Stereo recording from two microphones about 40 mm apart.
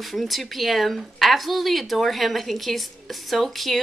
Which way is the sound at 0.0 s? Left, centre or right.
Centre.